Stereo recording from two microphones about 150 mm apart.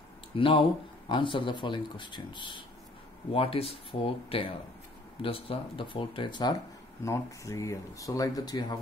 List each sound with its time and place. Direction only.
0.4 s speech: 35° left (ahead or behind)
7.0 s speech: 20° left (ahead or behind)